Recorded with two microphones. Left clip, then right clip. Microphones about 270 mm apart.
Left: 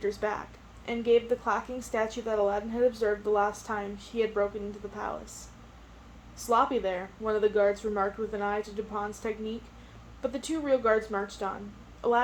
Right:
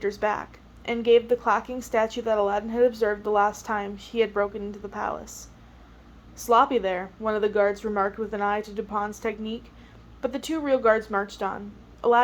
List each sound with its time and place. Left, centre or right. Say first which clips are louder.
0.0 s a woman's voice: right 5 dB; right
6.4 s a woman's voice: right 6 dB; right